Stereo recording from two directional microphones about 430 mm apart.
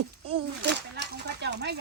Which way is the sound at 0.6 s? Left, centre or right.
Right.